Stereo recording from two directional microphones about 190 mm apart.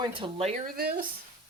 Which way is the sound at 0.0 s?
25° right (ahead or behind).